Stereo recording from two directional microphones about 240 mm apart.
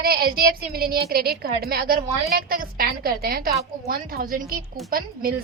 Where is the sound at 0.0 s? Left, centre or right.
Right.